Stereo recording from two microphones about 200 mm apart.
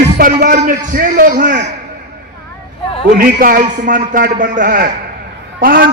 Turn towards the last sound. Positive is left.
turn(degrees=-45)  # may be behind; listen again after turning